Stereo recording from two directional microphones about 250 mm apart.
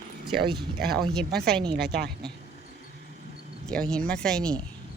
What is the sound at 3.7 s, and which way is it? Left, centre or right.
Speech, centre.